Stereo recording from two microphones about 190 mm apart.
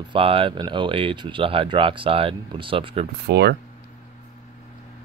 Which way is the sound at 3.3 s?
60° right (ahead or behind).